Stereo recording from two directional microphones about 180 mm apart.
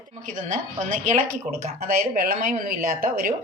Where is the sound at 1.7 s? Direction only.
55° right (ahead or behind).